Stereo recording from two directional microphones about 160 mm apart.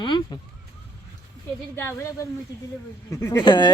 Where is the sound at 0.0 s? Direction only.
30° left (ahead or behind).